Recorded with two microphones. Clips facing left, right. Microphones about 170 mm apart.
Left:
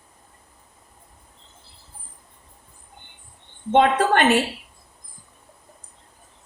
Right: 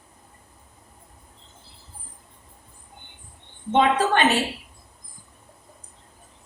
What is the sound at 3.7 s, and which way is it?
Speech, 55° left (ahead or behind).